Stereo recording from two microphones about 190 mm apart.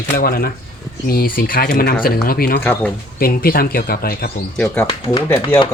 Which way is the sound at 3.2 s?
50° left (ahead or behind).